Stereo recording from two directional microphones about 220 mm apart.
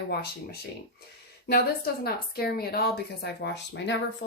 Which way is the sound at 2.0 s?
45° left (ahead or behind).